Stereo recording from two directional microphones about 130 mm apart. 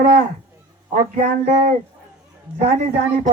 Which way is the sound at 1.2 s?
55° right (ahead or behind).